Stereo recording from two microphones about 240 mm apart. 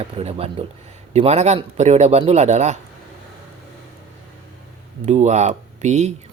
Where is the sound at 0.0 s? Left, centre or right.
Right.